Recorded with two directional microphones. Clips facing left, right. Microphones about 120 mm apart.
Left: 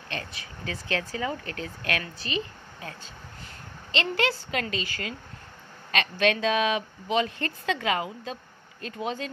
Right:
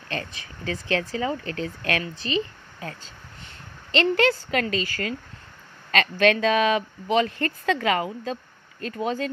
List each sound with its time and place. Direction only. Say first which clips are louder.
0.7 s a woman's voice: right 5 dB; 35° right (ahead or behind)
3.9 s speech: right 6 dB; 45° right (ahead or behind)